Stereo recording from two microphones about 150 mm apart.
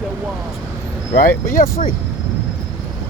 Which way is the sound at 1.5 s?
65° left (ahead or behind).